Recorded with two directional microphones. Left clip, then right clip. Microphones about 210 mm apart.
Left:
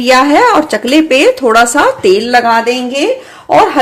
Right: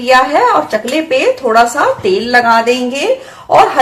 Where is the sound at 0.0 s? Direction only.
50° left (ahead or behind).